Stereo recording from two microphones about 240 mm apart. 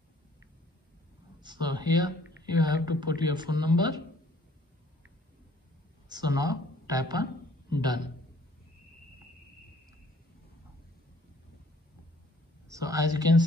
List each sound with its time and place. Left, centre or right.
1.4 s speech: centre
6.0 s a woman's voice: centre
12.7 s speech: centre